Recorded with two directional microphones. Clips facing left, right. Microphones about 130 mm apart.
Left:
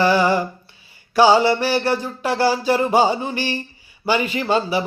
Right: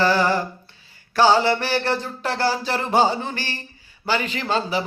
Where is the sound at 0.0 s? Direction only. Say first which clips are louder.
Left 3 dB; 15° left (ahead or behind).